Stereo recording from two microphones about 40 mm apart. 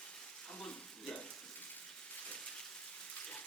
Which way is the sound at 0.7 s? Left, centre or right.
Left.